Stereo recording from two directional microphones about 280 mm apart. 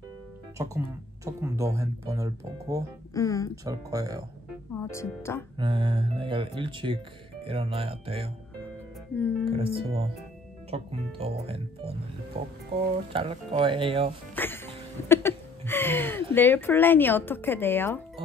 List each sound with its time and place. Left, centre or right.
0.6 s speech: centre
3.2 s speech: centre
3.6 s speech: centre
4.9 s speech: centre
5.6 s speech: centre
9.1 s speech: centre
9.5 s speech: right
14.3 s music: centre
15.0 s a sound: centre
16.3 s speech: centre